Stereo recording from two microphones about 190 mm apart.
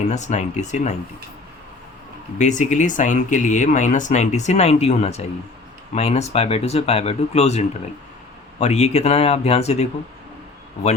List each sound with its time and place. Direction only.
0.1 s speech: 40° left (ahead or behind)
2.4 s speech: 40° left (ahead or behind)